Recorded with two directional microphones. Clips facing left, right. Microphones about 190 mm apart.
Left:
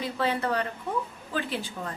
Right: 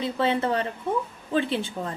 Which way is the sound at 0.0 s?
25° right (ahead or behind).